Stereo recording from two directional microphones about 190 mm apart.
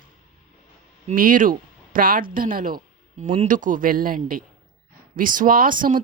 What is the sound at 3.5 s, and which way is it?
Speech, 45° right (ahead or behind).